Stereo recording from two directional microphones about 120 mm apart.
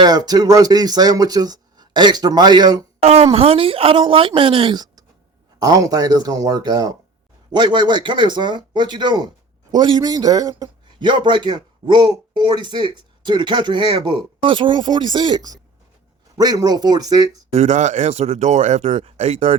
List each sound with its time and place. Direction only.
0.0 s speech: 35° right (ahead or behind)
3.0 s a woman's voice: 60° right (ahead or behind); by 17.3 s 35° right (ahead or behind)
17.5 s speech: 70° right (ahead or behind)